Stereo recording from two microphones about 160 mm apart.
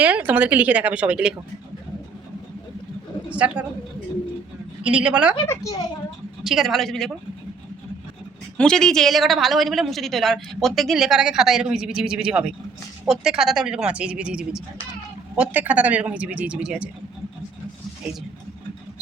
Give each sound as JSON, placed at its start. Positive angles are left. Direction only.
{"t": 0.0, "sound": "a man's voice", "side_deg": -10}
{"t": 3.2, "sound": "a woman's voice", "side_deg": -10}
{"t": 4.8, "sound": "a man's voice", "side_deg": -5}
{"t": 5.5, "sound": "a child's voice", "side_deg": 20}
{"t": 6.4, "sound": "a woman's voice", "side_deg": 0}
{"t": 8.5, "sound": "a woman's voice", "side_deg": 5}